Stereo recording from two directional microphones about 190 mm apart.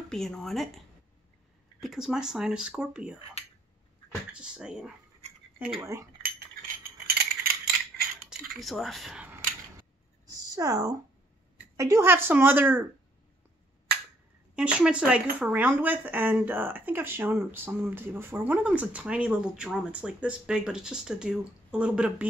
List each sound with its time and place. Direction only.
0.1 s speech: 5° left (ahead or behind)
1.8 s speech: centre (ahead or behind)
3.4 s a sound: 35° left (ahead or behind)
4.3 s speech: 5° right (ahead or behind)
5.8 s speech: 15° right (ahead or behind)
7.1 s rattle: 55° right (ahead or behind)
8.3 s speech: centre (ahead or behind)
9.8 s a sound: 20° right (ahead or behind)
11.7 s speech: 15° right (ahead or behind)
14.5 s speech: 5° right (ahead or behind)